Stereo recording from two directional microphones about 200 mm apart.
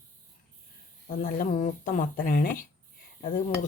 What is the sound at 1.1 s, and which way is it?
Speech, 45° left (ahead or behind).